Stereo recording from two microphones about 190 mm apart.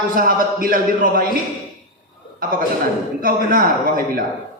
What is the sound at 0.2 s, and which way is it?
A man's voice, 45° right (ahead or behind).